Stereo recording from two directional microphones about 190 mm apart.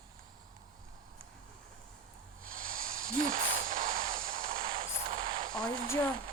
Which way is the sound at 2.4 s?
45° right (ahead or behind).